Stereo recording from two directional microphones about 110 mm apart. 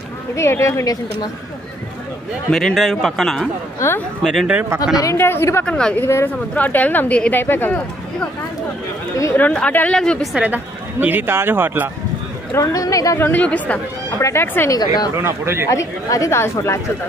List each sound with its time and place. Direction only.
0.4 s speech: 25° left (ahead or behind)
2.5 s speech: centre (ahead or behind)
5.1 s speech: 20° left (ahead or behind)
5.7 s speech: 5° left (ahead or behind)
6.0 s speech: 25° left (ahead or behind)
6.5 s speech: 15° left (ahead or behind)
9.4 s speech: 15° left (ahead or behind)
10.3 s speech: 15° right (ahead or behind)
12.5 s speech: 30° left (ahead or behind)
13.3 s speech: 15° left (ahead or behind)
14.7 s speech: 40° left (ahead or behind)
15.1 s speech: 25° right (ahead or behind)
15.7 s speech: 30° left (ahead or behind)